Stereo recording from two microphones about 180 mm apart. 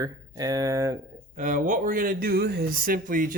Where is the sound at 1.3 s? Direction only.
45° right (ahead or behind).